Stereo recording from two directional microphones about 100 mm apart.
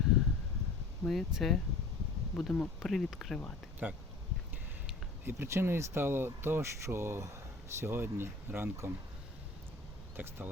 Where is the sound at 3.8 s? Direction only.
15° right (ahead or behind).